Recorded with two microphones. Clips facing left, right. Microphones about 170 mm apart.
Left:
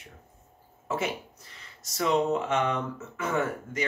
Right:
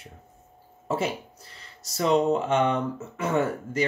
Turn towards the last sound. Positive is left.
turn(degrees=-35)  # may be behind; listen again after turning